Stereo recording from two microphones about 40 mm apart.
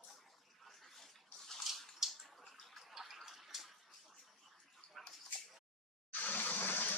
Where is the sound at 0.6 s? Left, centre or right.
Centre.